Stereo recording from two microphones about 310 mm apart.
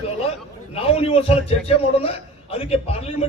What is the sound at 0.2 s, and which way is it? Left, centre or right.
A man's voice, centre.